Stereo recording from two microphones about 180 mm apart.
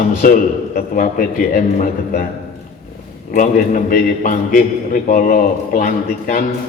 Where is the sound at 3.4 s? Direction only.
50° left (ahead or behind).